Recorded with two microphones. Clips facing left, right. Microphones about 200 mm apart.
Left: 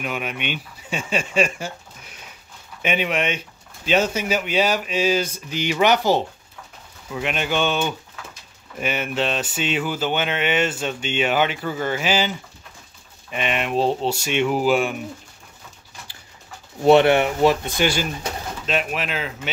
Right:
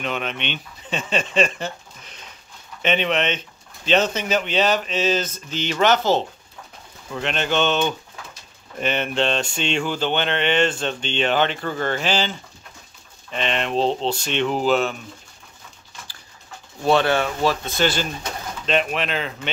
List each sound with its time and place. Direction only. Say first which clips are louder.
0.0 s speech: even; 10° left (ahead or behind)
16.8 s speech: left 5 dB; 20° left (ahead or behind)